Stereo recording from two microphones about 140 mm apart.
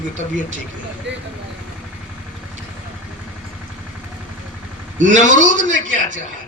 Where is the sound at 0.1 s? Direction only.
65° right (ahead or behind).